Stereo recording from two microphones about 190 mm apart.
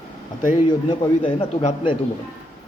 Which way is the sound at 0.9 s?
30° left (ahead or behind).